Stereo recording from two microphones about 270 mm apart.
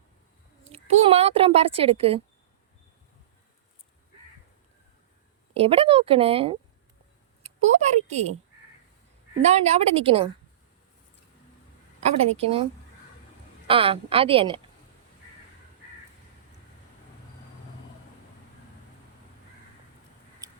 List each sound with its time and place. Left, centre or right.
0.7 s speech: right
5.5 s speech: right
9.4 s speech: right
11.9 s speech: right
13.7 s speech: centre
20.4 s a sound: centre